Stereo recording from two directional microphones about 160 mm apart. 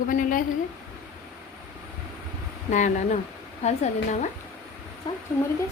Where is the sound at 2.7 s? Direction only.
50° left (ahead or behind).